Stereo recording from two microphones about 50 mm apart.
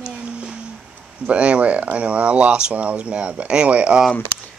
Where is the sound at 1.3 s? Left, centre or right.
Right.